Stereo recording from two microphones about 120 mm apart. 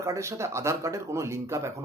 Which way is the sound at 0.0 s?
25° right (ahead or behind).